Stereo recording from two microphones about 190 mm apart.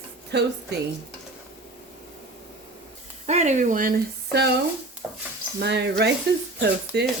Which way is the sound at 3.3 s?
35° right (ahead or behind).